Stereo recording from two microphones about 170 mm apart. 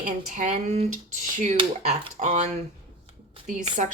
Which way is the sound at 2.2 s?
45° right (ahead or behind).